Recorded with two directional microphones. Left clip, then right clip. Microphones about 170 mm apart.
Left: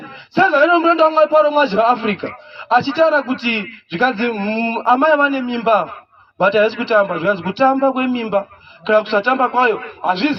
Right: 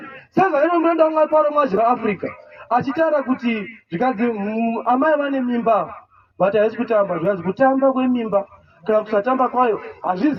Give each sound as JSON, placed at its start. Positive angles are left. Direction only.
{"t": 0.3, "sound": "a man's voice", "side_deg": -35}